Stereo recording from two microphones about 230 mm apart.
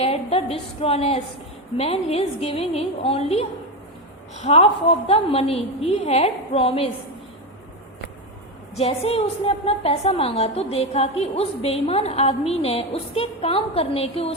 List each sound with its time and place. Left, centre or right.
0.0 s a woman's voice: left
8.7 s a woman's voice: left